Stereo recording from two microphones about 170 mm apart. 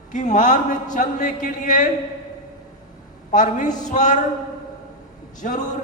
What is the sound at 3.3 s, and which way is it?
Speech, 45° left (ahead or behind).